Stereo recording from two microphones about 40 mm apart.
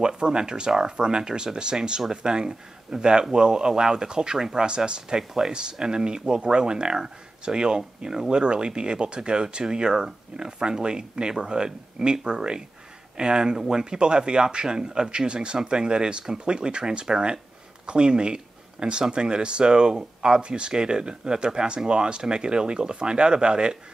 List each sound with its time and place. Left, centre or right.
0.0 s speech: right